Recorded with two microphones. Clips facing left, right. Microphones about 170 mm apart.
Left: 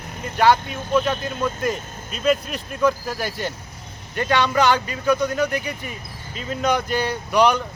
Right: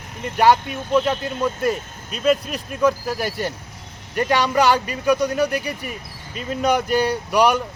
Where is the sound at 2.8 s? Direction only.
10° right (ahead or behind).